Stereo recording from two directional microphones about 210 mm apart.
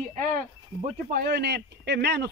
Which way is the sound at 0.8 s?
45° right (ahead or behind).